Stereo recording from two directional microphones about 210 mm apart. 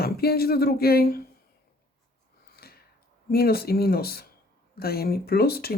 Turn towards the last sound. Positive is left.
turn(degrees=45)  # may be behind; listen again after turning